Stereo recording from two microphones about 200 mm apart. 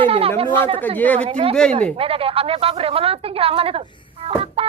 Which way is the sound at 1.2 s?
30° right (ahead or behind).